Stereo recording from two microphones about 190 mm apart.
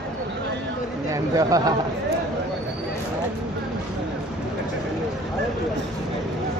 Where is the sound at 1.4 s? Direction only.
20° right (ahead or behind).